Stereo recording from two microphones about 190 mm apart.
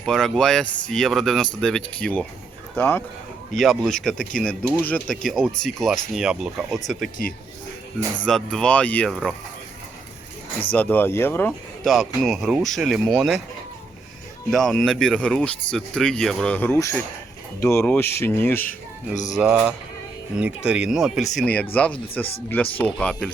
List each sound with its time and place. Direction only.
0.0 s speech: centre (ahead or behind)
3.5 s speech: centre (ahead or behind)
8.2 s speech: 5° left (ahead or behind)
10.7 s speech: 10° left (ahead or behind)
11.9 s speech: centre (ahead or behind)
14.5 s speech: centre (ahead or behind)
18.7 s speech: 40° left (ahead or behind)
19.4 s a sound: 5° right (ahead or behind)
20.4 s speech: 5° right (ahead or behind)